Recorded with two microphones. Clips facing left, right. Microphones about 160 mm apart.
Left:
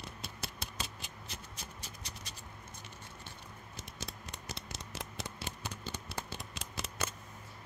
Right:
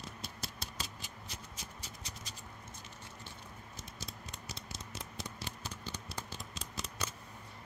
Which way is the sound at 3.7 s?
65° left (ahead or behind).